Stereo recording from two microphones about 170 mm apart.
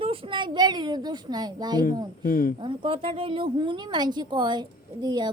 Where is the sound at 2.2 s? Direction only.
60° left (ahead or behind).